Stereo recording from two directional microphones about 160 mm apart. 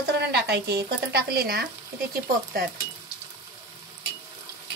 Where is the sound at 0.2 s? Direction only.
90° right.